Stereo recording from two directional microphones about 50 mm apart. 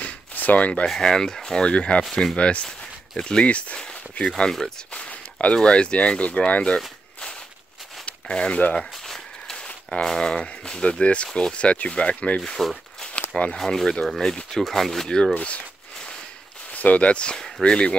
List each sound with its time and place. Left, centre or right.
0.0 s a sound: left
0.8 s speech: centre
4.5 s speech: centre
4.9 s speech: left
8.0 s speech: left
9.0 s a sound: centre
10.0 s speech: centre
12.4 s speech: centre
15.3 s a sound: left
16.7 s speech: left